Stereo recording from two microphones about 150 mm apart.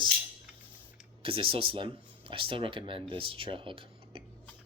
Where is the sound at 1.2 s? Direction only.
35° right (ahead or behind).